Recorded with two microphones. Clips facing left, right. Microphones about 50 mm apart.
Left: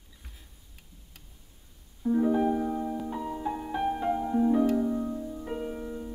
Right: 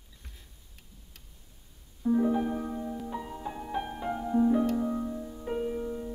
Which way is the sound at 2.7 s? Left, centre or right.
Centre.